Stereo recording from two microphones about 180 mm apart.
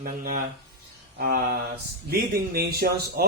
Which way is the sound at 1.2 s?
55° right (ahead or behind).